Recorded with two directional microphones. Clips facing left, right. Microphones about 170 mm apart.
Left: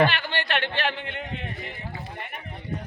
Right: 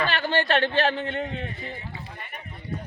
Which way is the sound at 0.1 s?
40° right (ahead or behind).